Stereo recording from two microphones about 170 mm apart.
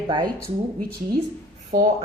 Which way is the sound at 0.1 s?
25° right (ahead or behind).